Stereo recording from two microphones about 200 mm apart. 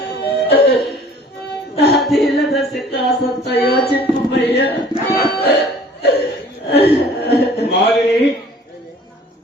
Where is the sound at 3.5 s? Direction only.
55° left (ahead or behind).